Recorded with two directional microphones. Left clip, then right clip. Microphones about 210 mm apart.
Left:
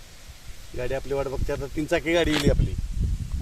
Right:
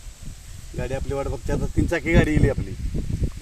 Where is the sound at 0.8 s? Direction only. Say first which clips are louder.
Even; 50° right (ahead or behind).